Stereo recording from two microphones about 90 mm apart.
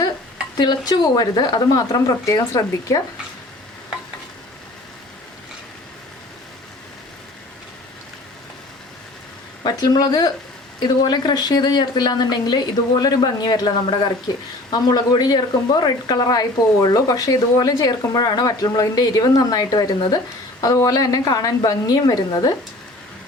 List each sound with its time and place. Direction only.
0.5 s speech: 50° left (ahead or behind)
9.6 s speech: 50° left (ahead or behind)